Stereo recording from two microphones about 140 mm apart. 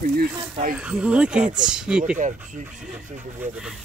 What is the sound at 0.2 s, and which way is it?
Speech, 80° right.